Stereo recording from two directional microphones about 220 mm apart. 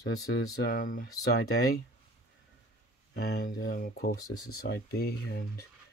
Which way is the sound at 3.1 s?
45° left (ahead or behind).